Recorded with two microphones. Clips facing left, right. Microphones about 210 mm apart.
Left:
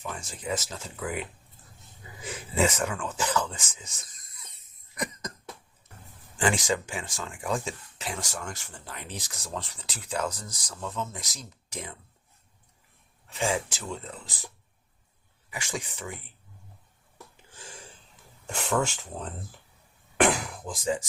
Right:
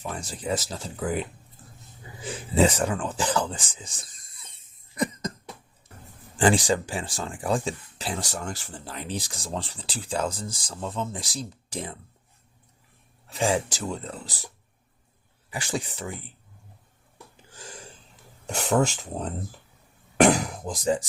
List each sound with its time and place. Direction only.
0.0 s speech: 35° right (ahead or behind)
2.3 s speech: 30° right (ahead or behind)
6.3 s speech: 35° right (ahead or behind)
13.3 s speech: 35° right (ahead or behind)
15.4 s speech: 35° right (ahead or behind)
18.4 s speech: 40° right (ahead or behind)
20.1 s speech: 40° right (ahead or behind)